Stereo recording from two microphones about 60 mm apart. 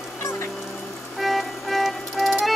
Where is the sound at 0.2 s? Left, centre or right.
Left.